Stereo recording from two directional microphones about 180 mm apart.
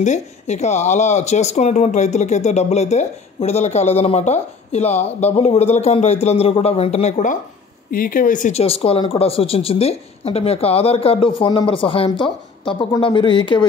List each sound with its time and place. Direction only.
0.0 s speech: 40° left (ahead or behind)
7.9 s speech: 50° left (ahead or behind); by 13.7 s 25° left (ahead or behind)